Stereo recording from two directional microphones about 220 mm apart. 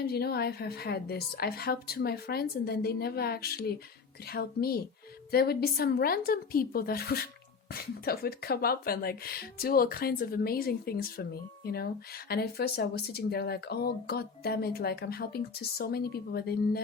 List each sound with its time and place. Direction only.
0.0 s speech: 45° left (ahead or behind)